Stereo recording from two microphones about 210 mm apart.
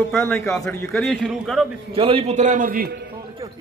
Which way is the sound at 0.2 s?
Centre (ahead or behind).